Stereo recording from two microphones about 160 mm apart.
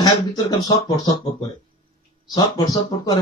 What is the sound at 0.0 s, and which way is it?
Speech, 25° left (ahead or behind).